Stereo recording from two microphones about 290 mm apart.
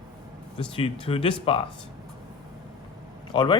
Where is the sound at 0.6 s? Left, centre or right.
Centre.